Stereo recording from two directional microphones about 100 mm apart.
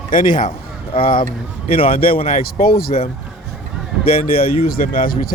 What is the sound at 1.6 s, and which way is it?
Speech, 70° left (ahead or behind).